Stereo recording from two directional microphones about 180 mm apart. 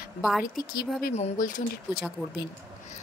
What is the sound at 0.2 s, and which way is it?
Speech, centre (ahead or behind).